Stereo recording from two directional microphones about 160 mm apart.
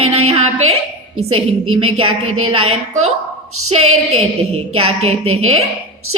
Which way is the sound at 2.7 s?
45° right (ahead or behind).